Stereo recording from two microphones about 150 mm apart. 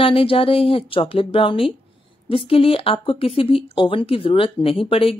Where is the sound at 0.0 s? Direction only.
35° left (ahead or behind).